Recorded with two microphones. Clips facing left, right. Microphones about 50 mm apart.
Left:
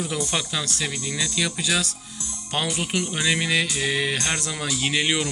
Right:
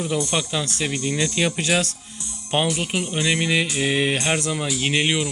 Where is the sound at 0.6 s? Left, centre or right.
Right.